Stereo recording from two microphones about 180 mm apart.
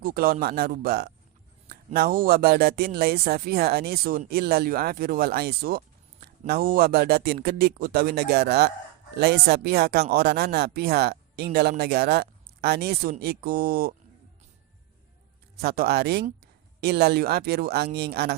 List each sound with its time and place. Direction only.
0.0 s speech: 50° right (ahead or behind)
15.6 s speech: 60° right (ahead or behind)